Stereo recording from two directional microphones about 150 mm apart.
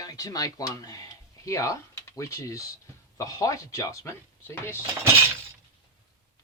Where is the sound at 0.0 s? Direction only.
25° left (ahead or behind).